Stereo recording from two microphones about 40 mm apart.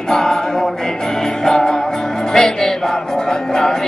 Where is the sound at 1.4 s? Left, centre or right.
Centre.